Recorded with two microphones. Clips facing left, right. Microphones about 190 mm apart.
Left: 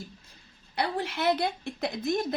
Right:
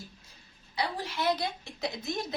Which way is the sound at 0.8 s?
60° left (ahead or behind).